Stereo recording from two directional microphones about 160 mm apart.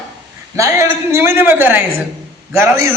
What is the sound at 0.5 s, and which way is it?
A man's voice, 20° right (ahead or behind).